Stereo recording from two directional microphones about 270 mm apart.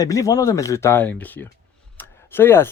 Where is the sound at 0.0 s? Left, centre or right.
Centre.